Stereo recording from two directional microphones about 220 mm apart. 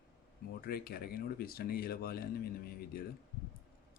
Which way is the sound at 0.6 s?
45° left (ahead or behind).